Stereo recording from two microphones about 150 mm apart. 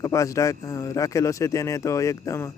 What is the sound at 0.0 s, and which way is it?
Speech, 20° left (ahead or behind).